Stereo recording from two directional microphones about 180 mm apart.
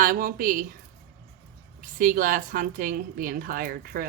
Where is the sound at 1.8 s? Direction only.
50° right (ahead or behind).